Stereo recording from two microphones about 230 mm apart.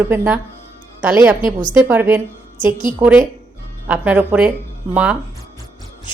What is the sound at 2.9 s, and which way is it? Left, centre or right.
A woman's voice, centre.